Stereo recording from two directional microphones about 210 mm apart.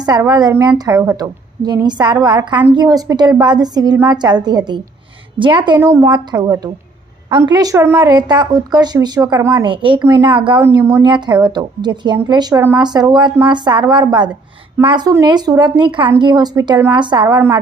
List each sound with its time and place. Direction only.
0.0 s speech: 15° right (ahead or behind)
9.6 s speech: 25° right (ahead or behind)